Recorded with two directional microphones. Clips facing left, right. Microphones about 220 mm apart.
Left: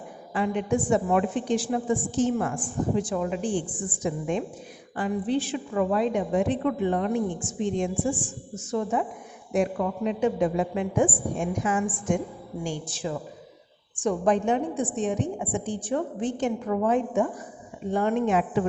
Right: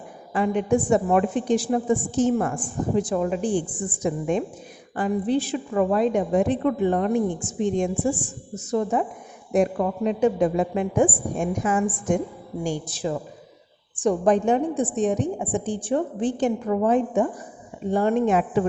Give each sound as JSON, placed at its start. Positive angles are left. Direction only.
{"t": 0.3, "sound": "a woman's voice", "side_deg": -45}